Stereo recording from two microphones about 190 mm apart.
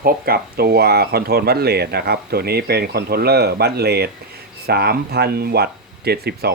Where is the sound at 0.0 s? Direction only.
55° right (ahead or behind).